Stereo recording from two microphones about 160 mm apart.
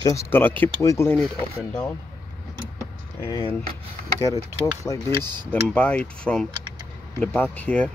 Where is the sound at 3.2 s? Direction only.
30° left (ahead or behind).